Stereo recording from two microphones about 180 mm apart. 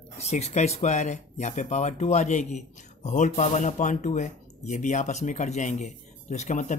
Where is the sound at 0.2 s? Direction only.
40° left (ahead or behind).